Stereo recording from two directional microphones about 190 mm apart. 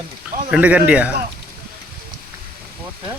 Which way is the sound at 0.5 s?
10° right (ahead or behind).